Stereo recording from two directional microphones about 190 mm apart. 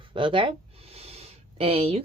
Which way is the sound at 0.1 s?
25° right (ahead or behind).